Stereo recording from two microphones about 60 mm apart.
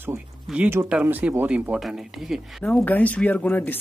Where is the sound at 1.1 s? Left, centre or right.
Right.